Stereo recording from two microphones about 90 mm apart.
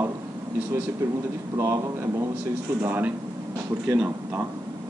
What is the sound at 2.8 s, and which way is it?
Speech, 20° right (ahead or behind).